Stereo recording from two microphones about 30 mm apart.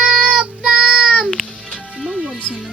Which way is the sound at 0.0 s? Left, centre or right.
Right.